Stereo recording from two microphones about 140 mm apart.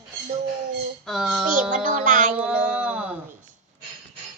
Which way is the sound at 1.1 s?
Centre (ahead or behind).